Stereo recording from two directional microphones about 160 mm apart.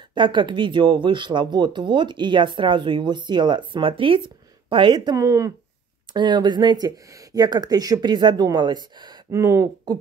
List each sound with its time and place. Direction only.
0.1 s speech: 30° right (ahead or behind)